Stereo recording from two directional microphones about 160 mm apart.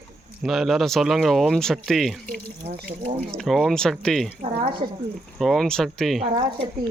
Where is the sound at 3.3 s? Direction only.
Centre (ahead or behind).